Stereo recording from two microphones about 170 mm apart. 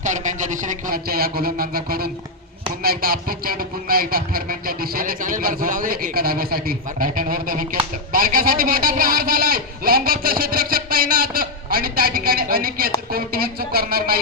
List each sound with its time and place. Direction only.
0.0 s speech: 45° right (ahead or behind); by 14.2 s 60° right (ahead or behind)